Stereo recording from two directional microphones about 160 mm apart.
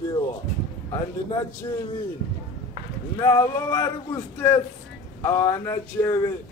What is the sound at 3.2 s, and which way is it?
Speech, 20° left (ahead or behind).